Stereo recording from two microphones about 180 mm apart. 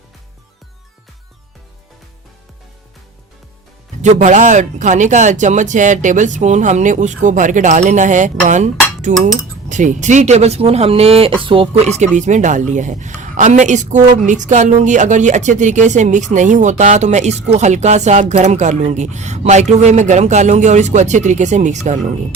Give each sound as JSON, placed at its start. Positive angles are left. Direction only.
{"t": 4.0, "sound": "speech", "side_deg": -40}